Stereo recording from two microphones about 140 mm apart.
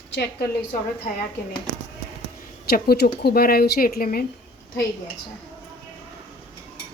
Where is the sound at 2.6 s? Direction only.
90° left.